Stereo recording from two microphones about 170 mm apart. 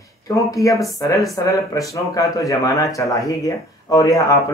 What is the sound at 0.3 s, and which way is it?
Speech, 20° left (ahead or behind).